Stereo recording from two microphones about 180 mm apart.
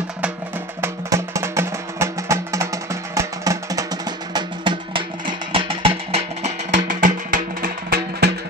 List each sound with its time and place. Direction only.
0.7 s music: 15° right (ahead or behind); by 6.5 s 30° right (ahead or behind)
6.9 s music: 45° right (ahead or behind)